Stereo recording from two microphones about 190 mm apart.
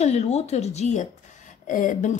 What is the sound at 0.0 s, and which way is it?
Speech, 35° left (ahead or behind).